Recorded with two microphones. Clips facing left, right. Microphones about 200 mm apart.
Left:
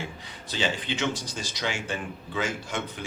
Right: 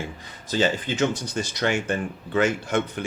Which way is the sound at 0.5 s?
45° right (ahead or behind).